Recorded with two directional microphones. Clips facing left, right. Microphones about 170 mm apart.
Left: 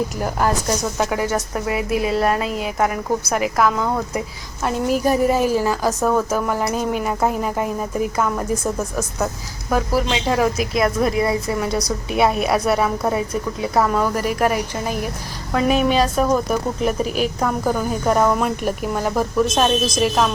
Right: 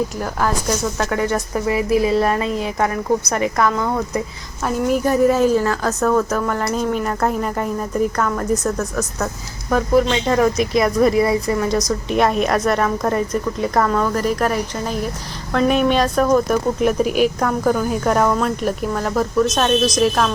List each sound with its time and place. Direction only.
0.2 s a woman's voice: 15° left (ahead or behind)